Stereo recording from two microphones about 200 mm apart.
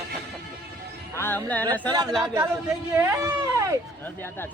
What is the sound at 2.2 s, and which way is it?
Speech, 15° right (ahead or behind).